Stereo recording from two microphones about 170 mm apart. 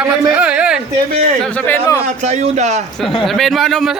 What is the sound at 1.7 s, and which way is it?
Speech, 20° left (ahead or behind).